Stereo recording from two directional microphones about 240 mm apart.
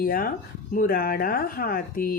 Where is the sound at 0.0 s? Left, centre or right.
Left.